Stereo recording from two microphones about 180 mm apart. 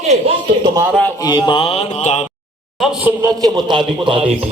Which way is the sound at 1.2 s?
25° left (ahead or behind).